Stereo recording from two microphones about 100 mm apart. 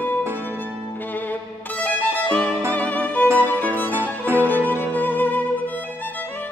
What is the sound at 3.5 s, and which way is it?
Music, 15° left (ahead or behind).